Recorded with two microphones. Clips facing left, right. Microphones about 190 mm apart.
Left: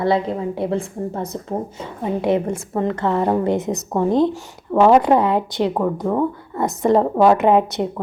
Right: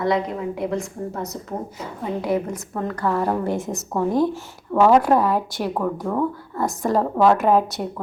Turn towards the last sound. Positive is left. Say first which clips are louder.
# left 3 dB
turn(degrees=20)  # may be behind; listen again after turning